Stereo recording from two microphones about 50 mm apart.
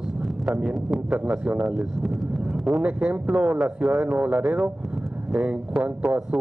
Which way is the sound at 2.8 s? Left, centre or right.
Right.